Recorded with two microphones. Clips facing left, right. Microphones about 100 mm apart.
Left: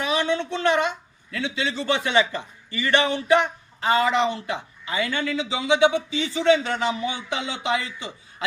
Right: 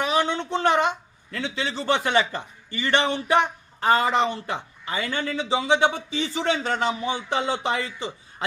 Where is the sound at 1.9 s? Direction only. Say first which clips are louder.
Even; 40° right (ahead or behind).